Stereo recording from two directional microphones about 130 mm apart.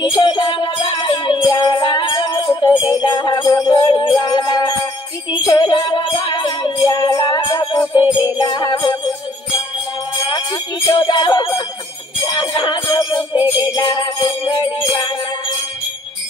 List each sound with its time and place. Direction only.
0.0 s music: 30° left (ahead or behind)
10.9 s music: 35° left (ahead or behind)